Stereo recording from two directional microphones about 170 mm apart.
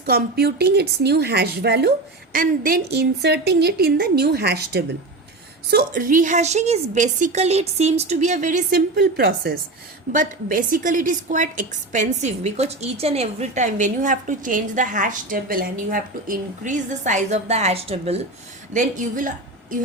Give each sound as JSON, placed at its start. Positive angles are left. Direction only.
{"t": 0.0, "sound": "a woman's voice", "side_deg": -65}
{"t": 2.3, "sound": "a woman's voice", "side_deg": -55}
{"t": 5.7, "sound": "a woman's voice", "side_deg": -55}
{"t": 9.0, "sound": "a woman's voice", "side_deg": -70}
{"t": 10.1, "sound": "a woman's voice", "side_deg": -50}
{"t": 18.7, "sound": "a woman's voice", "side_deg": -50}